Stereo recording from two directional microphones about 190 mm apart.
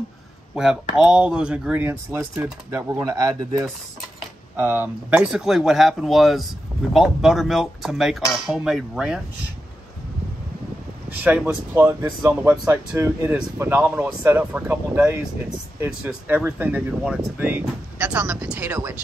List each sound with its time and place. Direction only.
0.6 s speech: 5° right (ahead or behind)
11.1 s speech: 10° right (ahead or behind)